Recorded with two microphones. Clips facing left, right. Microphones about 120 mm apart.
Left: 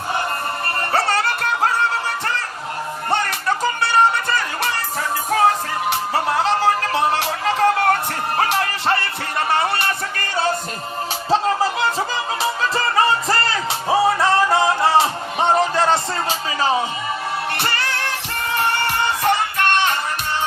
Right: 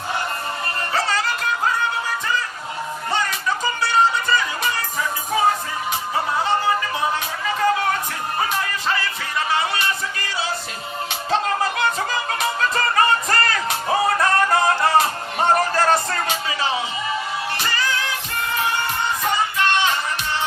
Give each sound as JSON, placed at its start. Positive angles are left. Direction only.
{"t": 0.9, "sound": "music", "side_deg": 60}
{"t": 5.9, "sound": "music", "side_deg": 70}
{"t": 11.3, "sound": "music", "side_deg": 30}
{"t": 16.6, "sound": "music", "side_deg": 40}
{"t": 17.6, "sound": "music", "side_deg": 60}